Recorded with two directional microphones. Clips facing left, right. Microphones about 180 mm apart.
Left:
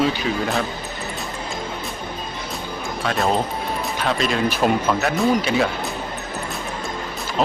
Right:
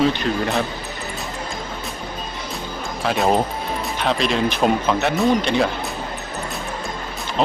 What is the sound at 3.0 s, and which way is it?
Speech, centre (ahead or behind).